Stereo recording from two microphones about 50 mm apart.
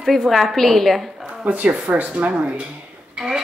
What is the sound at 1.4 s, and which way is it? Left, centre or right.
Speech, right.